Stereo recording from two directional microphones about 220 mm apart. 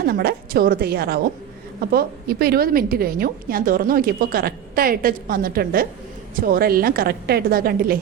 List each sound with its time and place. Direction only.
0.0 s a woman's voice: 45° right (ahead or behind)